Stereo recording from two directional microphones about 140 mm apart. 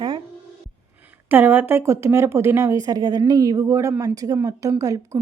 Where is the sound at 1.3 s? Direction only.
15° right (ahead or behind).